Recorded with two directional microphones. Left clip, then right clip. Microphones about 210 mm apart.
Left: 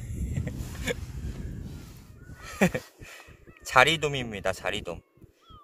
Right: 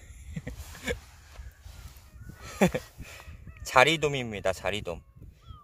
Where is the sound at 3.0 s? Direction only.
15° right (ahead or behind).